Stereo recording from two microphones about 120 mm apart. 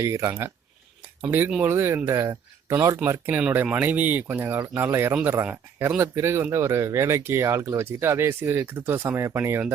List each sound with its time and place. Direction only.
0.0 s speech: 25° right (ahead or behind)